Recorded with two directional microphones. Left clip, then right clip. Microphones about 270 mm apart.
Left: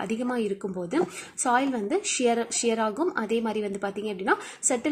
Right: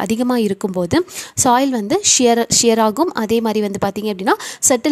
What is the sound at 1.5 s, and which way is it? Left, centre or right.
A woman's voice, right.